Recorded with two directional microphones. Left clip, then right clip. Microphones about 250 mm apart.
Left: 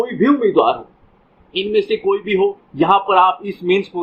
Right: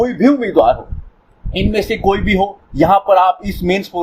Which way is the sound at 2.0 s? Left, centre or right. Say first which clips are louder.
Right 2 dB; right.